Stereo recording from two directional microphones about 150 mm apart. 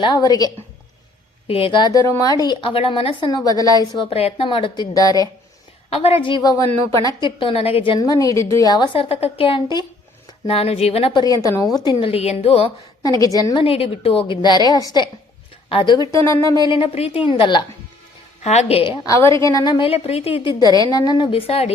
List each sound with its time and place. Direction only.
0.0 s a woman's voice: 30° left (ahead or behind)
1.5 s a woman's voice: 40° left (ahead or behind)
5.9 s a woman's voice: 40° left (ahead or behind)
9.0 s a woman's voice: 40° left (ahead or behind)
10.4 s a woman's voice: 40° left (ahead or behind)
11.2 s a woman's voice: 25° left (ahead or behind); by 12.7 s 40° left (ahead or behind)
13.1 s a woman's voice: 25° left (ahead or behind)
18.4 s a woman's voice: 45° left (ahead or behind)
19.0 s a woman's voice: 20° left (ahead or behind); by 21.7 s 40° left (ahead or behind)